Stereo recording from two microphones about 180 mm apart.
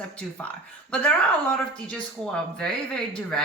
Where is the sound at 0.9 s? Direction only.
5° left (ahead or behind).